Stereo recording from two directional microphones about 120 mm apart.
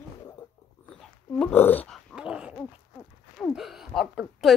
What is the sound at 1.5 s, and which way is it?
Speech, 15° left (ahead or behind).